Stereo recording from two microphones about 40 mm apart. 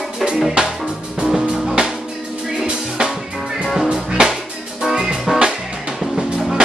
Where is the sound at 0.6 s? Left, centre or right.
Right.